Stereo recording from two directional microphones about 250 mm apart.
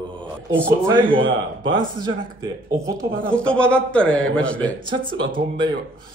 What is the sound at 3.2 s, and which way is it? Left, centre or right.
A man's voice, centre.